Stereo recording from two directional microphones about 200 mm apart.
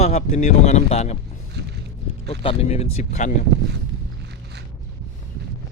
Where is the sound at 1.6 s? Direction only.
55° right (ahead or behind).